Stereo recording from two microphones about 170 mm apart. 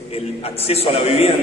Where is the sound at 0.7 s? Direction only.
35° left (ahead or behind).